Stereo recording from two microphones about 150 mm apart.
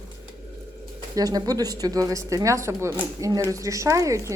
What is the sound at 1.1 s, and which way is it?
A woman's voice, 25° right (ahead or behind).